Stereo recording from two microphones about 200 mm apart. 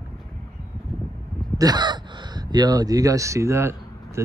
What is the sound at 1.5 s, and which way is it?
Speech, 20° right (ahead or behind).